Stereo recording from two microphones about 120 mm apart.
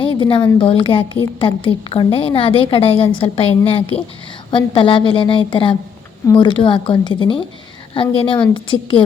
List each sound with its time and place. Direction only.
0.0 s a woman's voice: 45° left (ahead or behind)